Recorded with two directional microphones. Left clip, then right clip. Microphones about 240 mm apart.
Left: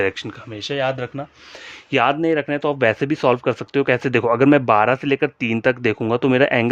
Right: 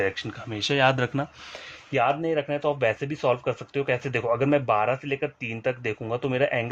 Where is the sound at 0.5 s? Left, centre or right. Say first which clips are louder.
Even; centre.